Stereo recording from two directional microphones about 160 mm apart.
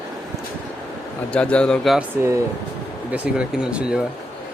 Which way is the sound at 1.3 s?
5° left (ahead or behind).